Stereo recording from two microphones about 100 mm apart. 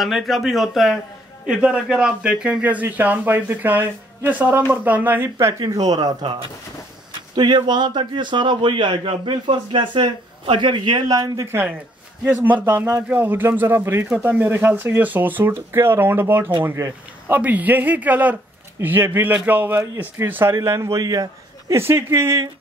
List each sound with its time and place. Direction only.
0.0 s a man's voice: centre (ahead or behind); by 5.5 s 20° right (ahead or behind)
5.5 s speech: 35° right (ahead or behind)
7.3 s a man's voice: 50° right (ahead or behind)
11.4 s a man's voice: 25° right (ahead or behind)
17.3 s a man's voice: 15° right (ahead or behind)